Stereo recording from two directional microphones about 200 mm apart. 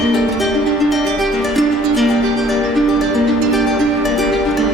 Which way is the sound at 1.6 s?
Centre (ahead or behind).